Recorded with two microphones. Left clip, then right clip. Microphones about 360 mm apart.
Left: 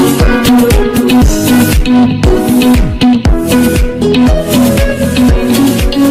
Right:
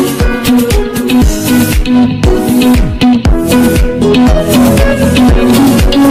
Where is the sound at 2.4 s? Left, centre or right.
Centre.